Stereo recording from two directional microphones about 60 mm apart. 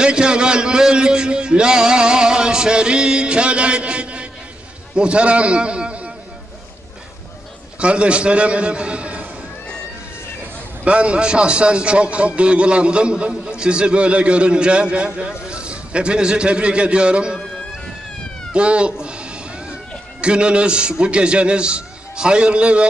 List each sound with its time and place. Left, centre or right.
0.0 s a sound: centre
4.9 s a man's voice: centre
7.8 s a man's voice: centre
10.8 s a man's voice: centre
18.5 s cat: centre
20.2 s a man's voice: centre